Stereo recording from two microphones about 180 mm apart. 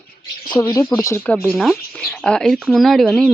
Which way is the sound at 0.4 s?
20° left (ahead or behind).